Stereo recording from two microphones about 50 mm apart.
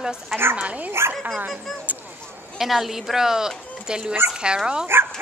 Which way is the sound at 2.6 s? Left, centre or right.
Centre.